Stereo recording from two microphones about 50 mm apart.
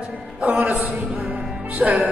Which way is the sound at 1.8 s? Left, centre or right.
Right.